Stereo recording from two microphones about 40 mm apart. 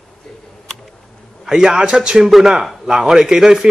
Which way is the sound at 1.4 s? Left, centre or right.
Centre.